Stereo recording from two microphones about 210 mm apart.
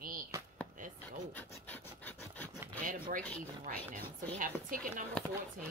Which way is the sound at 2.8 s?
40° right (ahead or behind).